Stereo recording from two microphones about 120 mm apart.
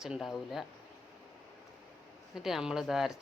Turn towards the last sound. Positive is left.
turn(degrees=0)  # may be behind; listen again after turning